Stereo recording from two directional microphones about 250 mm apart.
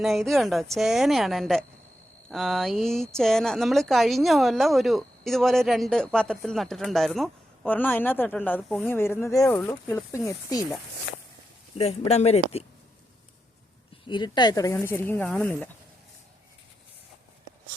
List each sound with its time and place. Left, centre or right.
0.0 s speech: centre
11.8 s speech: left
14.1 s speech: centre